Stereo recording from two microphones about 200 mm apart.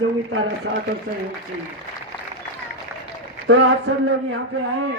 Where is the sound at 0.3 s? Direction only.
75° right (ahead or behind).